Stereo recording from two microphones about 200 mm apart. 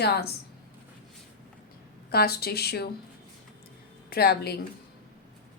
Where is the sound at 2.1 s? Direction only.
50° left (ahead or behind).